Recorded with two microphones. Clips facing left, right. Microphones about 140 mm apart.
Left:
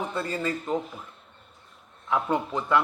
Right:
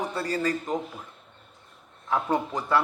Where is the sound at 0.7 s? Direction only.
15° right (ahead or behind).